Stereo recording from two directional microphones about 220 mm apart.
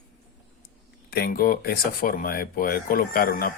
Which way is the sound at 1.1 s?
45° left (ahead or behind).